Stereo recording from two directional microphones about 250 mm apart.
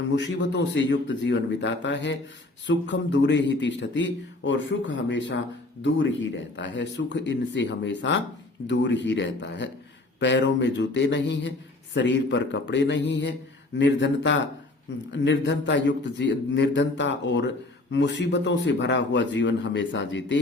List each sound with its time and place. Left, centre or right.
0.2 s a man's voice: left